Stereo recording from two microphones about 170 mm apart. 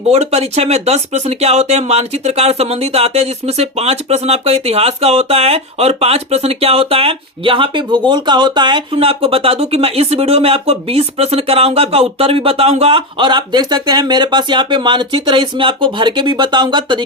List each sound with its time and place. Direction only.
0.1 s speech: 40° right (ahead or behind)